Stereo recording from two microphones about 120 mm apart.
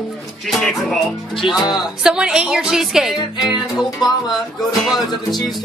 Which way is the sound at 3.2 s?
35° left (ahead or behind).